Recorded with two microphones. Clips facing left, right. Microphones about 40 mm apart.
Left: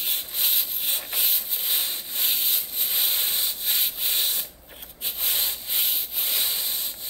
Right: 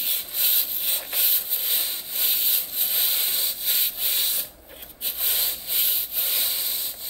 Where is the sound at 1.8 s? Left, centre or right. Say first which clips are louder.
Left 1 dB; centre.